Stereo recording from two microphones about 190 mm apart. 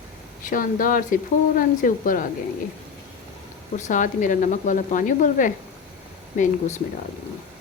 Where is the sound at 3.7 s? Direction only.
40° left (ahead or behind).